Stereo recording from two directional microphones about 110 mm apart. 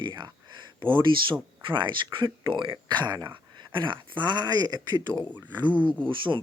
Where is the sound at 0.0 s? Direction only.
45° right (ahead or behind).